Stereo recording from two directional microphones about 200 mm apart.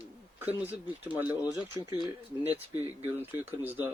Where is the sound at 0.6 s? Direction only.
10° right (ahead or behind).